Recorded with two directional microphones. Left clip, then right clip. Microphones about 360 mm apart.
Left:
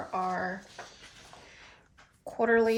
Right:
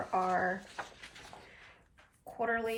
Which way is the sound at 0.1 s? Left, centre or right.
Centre.